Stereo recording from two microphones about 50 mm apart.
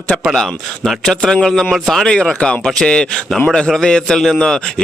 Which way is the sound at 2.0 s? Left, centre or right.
Centre.